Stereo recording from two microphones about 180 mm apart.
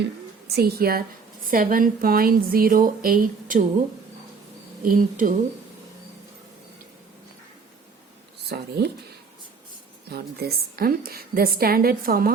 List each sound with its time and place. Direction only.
0.0 s a woman's voice: 60° right (ahead or behind)
4.8 s speech: 50° right (ahead or behind)
8.4 s a woman's voice: 65° right (ahead or behind)
10.1 s a woman's voice: 60° right (ahead or behind)